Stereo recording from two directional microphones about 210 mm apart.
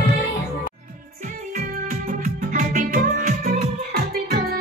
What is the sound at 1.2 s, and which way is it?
Music, 40° right (ahead or behind).